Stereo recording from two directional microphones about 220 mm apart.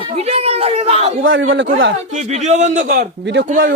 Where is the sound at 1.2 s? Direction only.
60° right (ahead or behind).